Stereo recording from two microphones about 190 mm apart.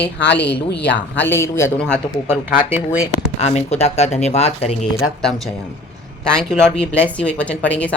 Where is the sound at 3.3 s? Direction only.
35° left (ahead or behind).